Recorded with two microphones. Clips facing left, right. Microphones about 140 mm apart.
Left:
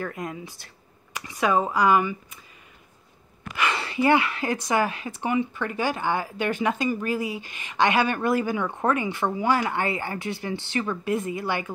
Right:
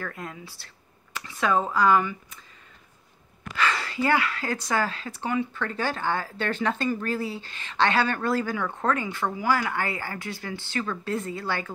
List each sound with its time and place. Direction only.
0.0 s speech: 20° left (ahead or behind)
3.5 s speech: 20° left (ahead or behind)